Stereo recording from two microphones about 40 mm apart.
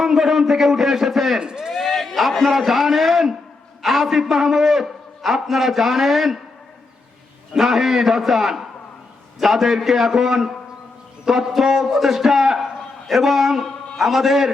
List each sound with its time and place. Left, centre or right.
0.0 s a man's voice: centre
1.4 s speech: centre
1.7 s a sound: centre
3.8 s a man's voice: centre
7.5 s a man's voice: centre